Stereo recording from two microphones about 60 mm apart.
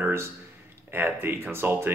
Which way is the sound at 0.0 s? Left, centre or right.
Right.